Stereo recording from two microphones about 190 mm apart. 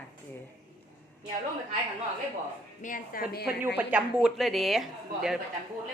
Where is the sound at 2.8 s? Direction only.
45° left (ahead or behind).